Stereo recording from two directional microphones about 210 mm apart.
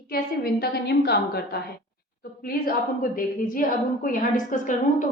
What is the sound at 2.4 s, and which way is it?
A woman's voice, 45° left (ahead or behind).